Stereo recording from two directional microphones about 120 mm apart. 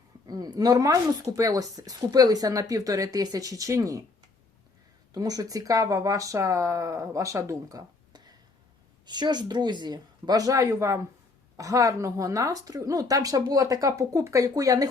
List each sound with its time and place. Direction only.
0.3 s a woman's voice: 30° right (ahead or behind)
5.1 s a woman's voice: 30° right (ahead or behind)